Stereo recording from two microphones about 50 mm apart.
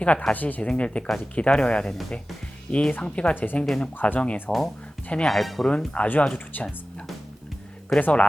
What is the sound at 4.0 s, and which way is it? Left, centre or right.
Speech, left.